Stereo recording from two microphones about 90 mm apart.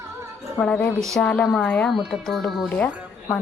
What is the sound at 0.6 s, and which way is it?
Speech, 15° left (ahead or behind).